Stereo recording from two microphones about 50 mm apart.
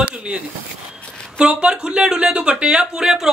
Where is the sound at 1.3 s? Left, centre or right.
Right.